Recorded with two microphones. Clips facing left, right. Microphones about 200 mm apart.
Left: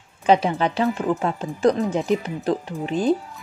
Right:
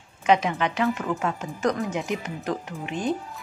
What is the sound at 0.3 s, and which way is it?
Speech, 30° left (ahead or behind).